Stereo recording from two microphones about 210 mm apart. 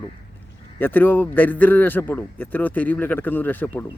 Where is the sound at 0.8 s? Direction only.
10° left (ahead or behind).